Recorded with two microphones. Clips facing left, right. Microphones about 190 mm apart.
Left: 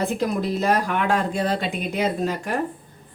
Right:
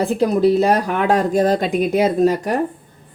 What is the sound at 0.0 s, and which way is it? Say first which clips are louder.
Speech: right 8 dB; 35° right (ahead or behind).